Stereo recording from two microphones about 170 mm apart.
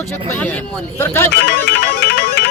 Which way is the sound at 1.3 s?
75° left (ahead or behind).